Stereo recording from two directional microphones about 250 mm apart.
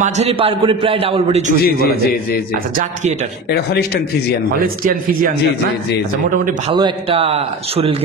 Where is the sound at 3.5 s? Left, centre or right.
Left.